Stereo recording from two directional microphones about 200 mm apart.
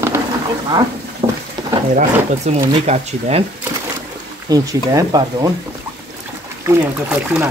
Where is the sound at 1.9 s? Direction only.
40° right (ahead or behind).